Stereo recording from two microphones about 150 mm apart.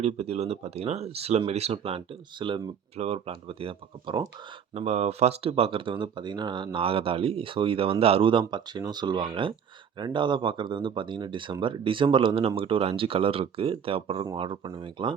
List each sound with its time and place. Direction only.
0.0 s speech: 45° right (ahead or behind)
4.7 s speech: 45° right (ahead or behind)